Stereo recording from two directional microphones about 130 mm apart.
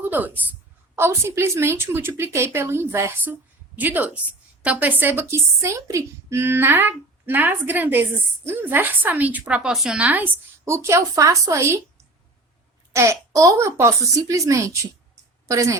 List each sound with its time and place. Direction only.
0.0 s a woman's voice: 15° right (ahead or behind)
10.7 s a woman's voice: 20° right (ahead or behind)
12.9 s a woman's voice: 20° right (ahead or behind)